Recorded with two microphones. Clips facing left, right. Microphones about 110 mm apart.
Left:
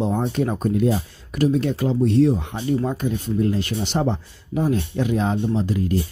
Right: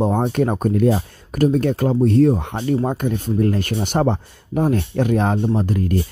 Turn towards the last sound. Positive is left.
turn(degrees=-50)  # may be behind; listen again after turning